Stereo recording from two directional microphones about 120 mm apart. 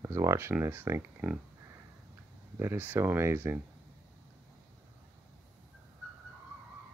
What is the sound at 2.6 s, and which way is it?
Speech, 20° right (ahead or behind).